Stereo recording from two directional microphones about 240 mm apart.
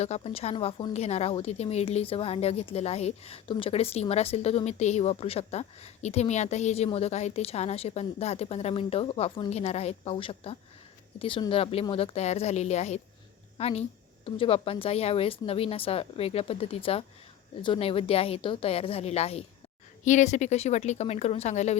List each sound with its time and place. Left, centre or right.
0.0 s speech: left